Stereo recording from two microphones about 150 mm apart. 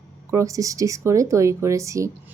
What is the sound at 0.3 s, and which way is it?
A woman's voice, 20° right (ahead or behind).